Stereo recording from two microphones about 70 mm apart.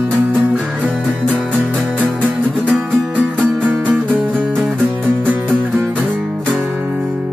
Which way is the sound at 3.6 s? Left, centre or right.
Centre.